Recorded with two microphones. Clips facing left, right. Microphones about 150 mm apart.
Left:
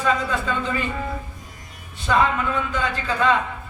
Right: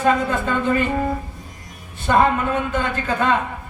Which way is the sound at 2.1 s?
50° right (ahead or behind).